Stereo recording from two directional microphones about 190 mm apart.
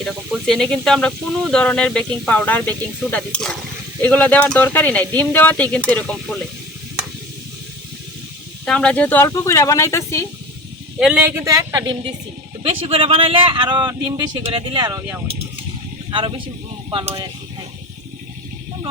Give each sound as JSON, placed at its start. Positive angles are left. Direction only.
{"t": 0.0, "sound": "speech", "side_deg": 0}
{"t": 8.6, "sound": "speech", "side_deg": 5}
{"t": 11.0, "sound": "speech", "side_deg": -5}
{"t": 11.4, "sound": "speech", "side_deg": -15}
{"t": 16.9, "sound": "speech", "side_deg": -30}